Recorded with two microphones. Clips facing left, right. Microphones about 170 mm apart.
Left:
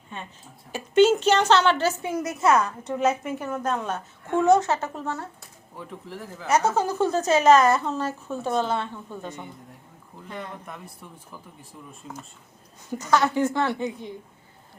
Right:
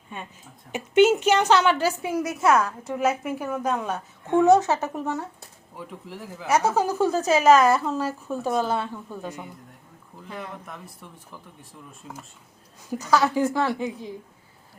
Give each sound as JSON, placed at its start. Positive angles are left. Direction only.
{"t": 0.7, "sound": "a woman's voice", "side_deg": -15}